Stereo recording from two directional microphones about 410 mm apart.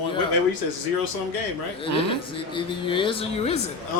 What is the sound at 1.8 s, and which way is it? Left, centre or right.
Speech, centre.